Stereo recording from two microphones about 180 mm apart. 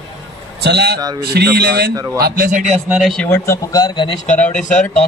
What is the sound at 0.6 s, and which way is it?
Speech, 65° right (ahead or behind).